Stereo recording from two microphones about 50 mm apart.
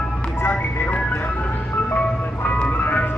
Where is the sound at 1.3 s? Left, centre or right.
Left.